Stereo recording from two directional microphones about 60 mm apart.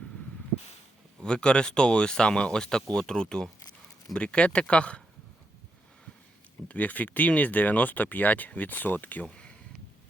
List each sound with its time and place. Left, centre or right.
1.2 s speech: centre
6.7 s speech: left